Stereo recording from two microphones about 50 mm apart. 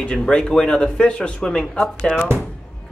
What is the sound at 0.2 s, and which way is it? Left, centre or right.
Speech, centre.